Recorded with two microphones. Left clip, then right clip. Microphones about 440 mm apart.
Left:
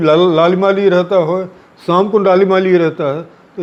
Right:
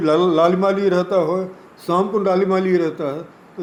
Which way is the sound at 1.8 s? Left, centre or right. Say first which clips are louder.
Left 7 dB; left.